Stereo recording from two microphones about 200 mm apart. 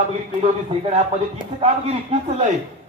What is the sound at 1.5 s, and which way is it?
Speech, 30° right (ahead or behind).